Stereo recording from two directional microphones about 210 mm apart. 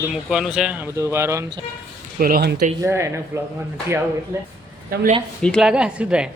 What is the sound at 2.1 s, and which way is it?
Speech, 45° right (ahead or behind).